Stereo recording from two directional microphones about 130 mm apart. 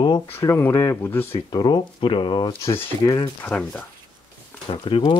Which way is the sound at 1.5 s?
35° left (ahead or behind).